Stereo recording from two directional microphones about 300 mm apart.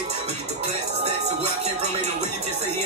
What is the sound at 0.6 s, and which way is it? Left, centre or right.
Music, right.